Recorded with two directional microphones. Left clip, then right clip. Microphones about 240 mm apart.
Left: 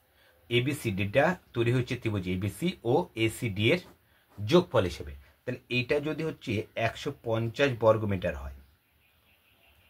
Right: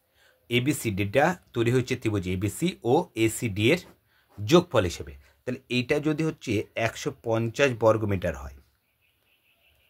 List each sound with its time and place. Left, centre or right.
0.5 s speech: right